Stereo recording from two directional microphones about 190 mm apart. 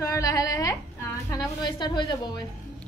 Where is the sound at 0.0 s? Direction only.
20° left (ahead or behind).